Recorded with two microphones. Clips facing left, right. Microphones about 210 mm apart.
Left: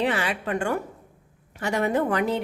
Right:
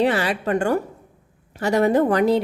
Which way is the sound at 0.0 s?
40° right (ahead or behind).